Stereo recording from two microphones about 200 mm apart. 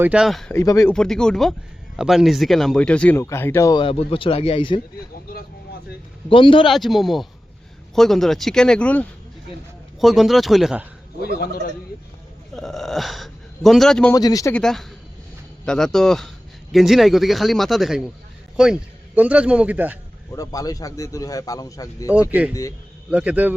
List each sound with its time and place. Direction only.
0.0 s speech: 5° right (ahead or behind)
0.5 s speech: 15° left (ahead or behind)
0.9 s speech: 5° left (ahead or behind); by 4.8 s 25° left (ahead or behind)
5.1 s speech: 50° left (ahead or behind)
6.2 s a man's voice: 25° left (ahead or behind)
6.7 s speech: centre (ahead or behind)
12.5 s speech: centre (ahead or behind)
14.1 s speech: 20° left (ahead or behind)
14.5 s a man's voice: centre (ahead or behind)
20.3 s speech: 15° left (ahead or behind)
22.1 s a man's voice: 5° right (ahead or behind)